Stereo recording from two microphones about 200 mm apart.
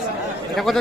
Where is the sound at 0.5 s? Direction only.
Centre (ahead or behind).